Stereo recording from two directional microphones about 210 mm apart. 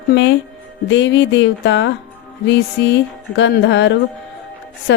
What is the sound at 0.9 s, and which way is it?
Speech, 60° left (ahead or behind).